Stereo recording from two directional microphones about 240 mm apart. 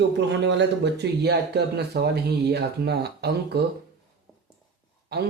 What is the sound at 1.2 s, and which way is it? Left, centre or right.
Speech, right.